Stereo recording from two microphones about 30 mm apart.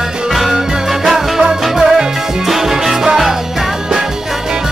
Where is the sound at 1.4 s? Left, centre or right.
Right.